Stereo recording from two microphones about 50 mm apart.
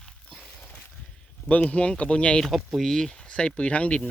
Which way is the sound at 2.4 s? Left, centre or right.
Centre.